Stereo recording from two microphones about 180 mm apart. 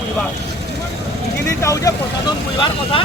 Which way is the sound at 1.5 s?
15° left (ahead or behind).